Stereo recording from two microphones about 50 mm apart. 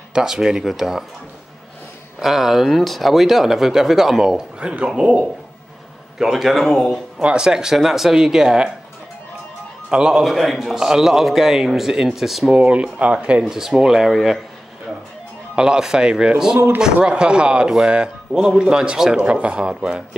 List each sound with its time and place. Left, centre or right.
0.1 s a man's voice: centre
2.1 s speech: centre
4.6 s speech: right
6.1 s speech: centre
6.6 s speech: centre
7.2 s a man's voice: centre
9.8 s a man's voice: centre
10.2 s a man's voice: centre
12.4 s a man's voice: right; by 14.4 s centre
15.5 s a man's voice: centre